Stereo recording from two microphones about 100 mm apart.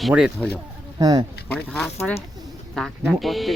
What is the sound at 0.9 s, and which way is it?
Speech, 40° right (ahead or behind).